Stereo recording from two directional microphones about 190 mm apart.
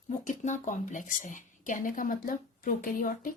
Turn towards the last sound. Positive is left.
turn(degrees=45)  # may be behind; listen again after turning